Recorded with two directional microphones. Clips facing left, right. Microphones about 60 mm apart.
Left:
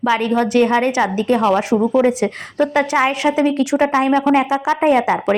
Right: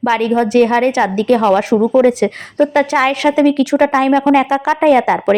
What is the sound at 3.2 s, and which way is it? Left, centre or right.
Speech, centre.